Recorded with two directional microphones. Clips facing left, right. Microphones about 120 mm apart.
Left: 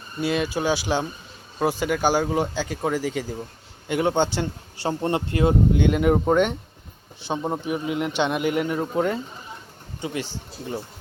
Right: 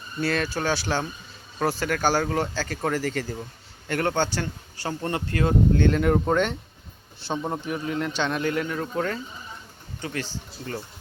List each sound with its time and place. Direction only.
0.2 s a man's voice: 15° left (ahead or behind)